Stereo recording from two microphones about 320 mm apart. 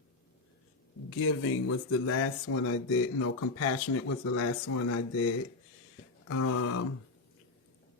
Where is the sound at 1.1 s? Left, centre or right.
Left.